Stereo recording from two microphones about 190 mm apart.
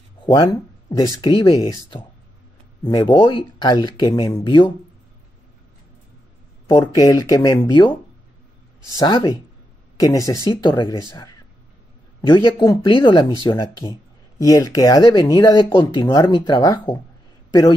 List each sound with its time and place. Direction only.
0.2 s speech: 20° left (ahead or behind)
6.8 s speech: 20° left (ahead or behind)
8.9 s a man's voice: 20° left (ahead or behind)